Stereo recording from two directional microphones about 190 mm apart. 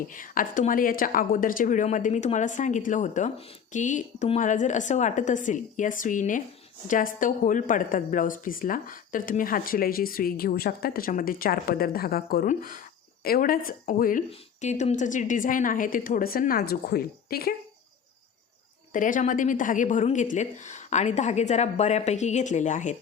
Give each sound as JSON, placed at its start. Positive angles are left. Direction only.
{"t": 0.1, "sound": "a woman's voice", "side_deg": 45}
{"t": 18.9, "sound": "a woman's voice", "side_deg": 45}